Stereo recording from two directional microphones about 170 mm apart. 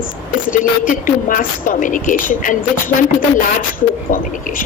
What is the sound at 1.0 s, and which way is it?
A woman's voice, 50° left (ahead or behind).